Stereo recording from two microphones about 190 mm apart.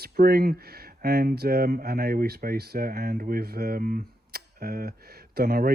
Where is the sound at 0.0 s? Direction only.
55° right (ahead or behind).